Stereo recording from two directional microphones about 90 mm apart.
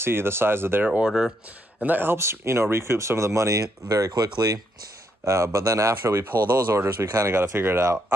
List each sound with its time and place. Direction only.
0.0 s speech: 25° right (ahead or behind)
0.8 s speech: 15° right (ahead or behind); by 4.6 s 45° right (ahead or behind)
5.2 s speech: 35° right (ahead or behind)